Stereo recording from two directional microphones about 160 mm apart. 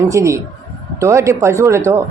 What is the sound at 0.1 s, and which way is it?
A woman's voice, 20° right (ahead or behind).